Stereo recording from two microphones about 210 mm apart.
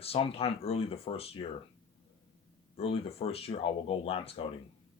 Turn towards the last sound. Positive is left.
turn(degrees=25)  # may be behind; listen again after turning